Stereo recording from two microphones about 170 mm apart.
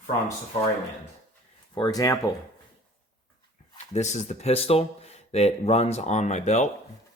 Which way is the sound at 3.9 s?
40° left (ahead or behind).